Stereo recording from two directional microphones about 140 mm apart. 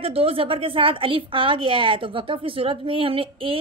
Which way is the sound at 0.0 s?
40° right (ahead or behind).